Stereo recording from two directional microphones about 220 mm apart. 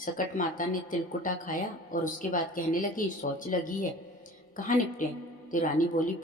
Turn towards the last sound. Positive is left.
turn(degrees=35)  # may be behind; listen again after turning